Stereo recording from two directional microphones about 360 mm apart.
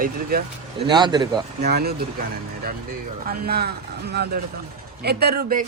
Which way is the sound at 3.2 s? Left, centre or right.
Right.